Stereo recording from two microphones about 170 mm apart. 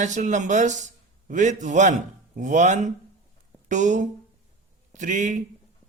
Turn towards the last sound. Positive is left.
turn(degrees=-45)  # may be behind; listen again after turning